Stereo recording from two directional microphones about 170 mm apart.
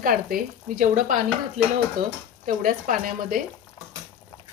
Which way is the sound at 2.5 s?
50° right (ahead or behind).